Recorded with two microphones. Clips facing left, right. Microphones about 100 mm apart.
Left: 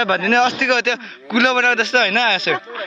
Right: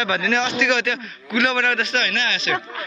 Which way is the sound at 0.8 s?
90° left.